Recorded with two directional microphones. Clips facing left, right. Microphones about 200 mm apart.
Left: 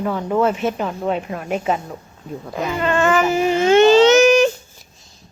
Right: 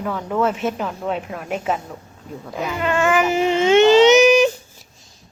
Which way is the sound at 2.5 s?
5° right (ahead or behind).